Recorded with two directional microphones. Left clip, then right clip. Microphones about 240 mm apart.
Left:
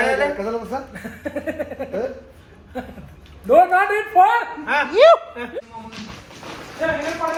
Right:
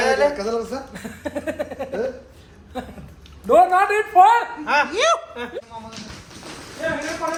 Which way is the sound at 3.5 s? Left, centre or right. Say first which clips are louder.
Left 1 dB; right.